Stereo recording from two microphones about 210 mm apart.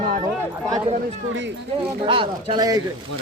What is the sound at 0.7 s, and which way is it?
Speech, 20° right (ahead or behind).